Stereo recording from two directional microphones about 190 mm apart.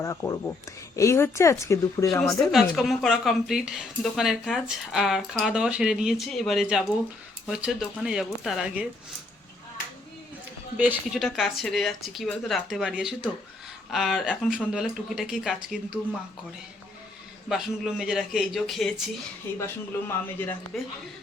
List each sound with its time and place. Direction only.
0.0 s speech: 15° left (ahead or behind)
2.5 s a woman's voice: centre (ahead or behind)
10.8 s a woman's voice: 5° right (ahead or behind)
17.5 s a woman's voice: centre (ahead or behind)
19.5 s speech: 15° left (ahead or behind)
20.7 s a woman's voice: centre (ahead or behind)